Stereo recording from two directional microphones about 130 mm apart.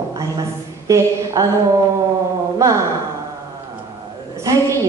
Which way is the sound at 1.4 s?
25° right (ahead or behind).